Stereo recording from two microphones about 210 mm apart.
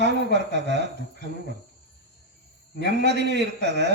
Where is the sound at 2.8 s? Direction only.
55° right (ahead or behind).